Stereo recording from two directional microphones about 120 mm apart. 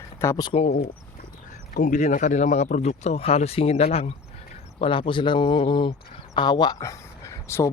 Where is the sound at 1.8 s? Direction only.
90° left; by 4.1 s 60° left (ahead or behind).